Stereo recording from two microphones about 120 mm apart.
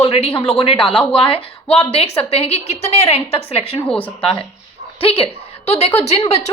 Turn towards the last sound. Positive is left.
turn(degrees=60)  # may be behind; listen again after turning